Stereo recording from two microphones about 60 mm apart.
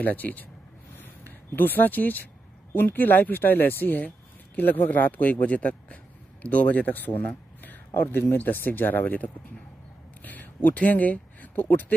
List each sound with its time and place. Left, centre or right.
0.0 s speech: left
1.5 s speech: left